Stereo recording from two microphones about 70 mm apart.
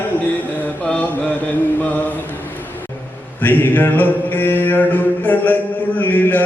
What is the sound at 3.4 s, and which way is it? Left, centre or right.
Mantra, left.